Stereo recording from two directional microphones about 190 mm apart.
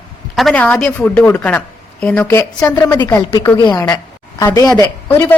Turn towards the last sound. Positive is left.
turn(degrees=15)  # may be behind; listen again after turning